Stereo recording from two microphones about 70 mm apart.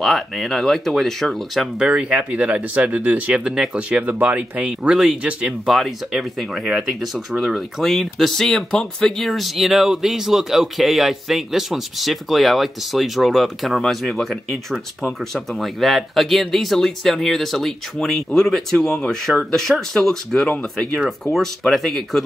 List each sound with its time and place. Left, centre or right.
0.0 s speech: centre
1.8 s speech: centre
3.7 s speech: right
4.8 s speech: centre
20.4 s speech: centre
21.3 s speech: centre